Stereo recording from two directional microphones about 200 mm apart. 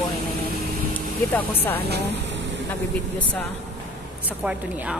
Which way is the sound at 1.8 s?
55° right (ahead or behind).